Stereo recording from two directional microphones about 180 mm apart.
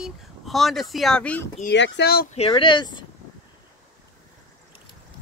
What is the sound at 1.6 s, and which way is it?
Speech, 80° left.